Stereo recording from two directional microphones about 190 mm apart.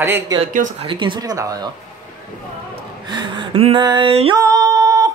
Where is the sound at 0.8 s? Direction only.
25° right (ahead or behind).